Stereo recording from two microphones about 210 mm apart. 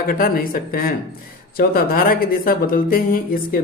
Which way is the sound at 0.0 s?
40° left (ahead or behind).